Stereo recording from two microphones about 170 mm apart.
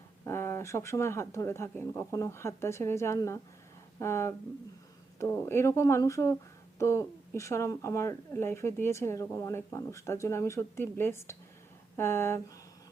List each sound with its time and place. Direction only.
0.3 s a woman's voice: 15° left (ahead or behind)